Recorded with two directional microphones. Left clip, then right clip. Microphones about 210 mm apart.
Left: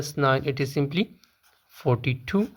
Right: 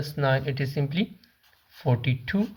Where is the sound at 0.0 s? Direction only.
40° left (ahead or behind).